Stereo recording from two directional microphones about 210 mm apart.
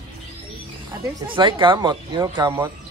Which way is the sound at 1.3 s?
25° right (ahead or behind).